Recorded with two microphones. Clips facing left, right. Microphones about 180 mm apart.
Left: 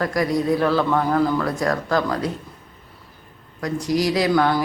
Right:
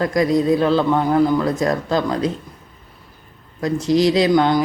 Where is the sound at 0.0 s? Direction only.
20° right (ahead or behind).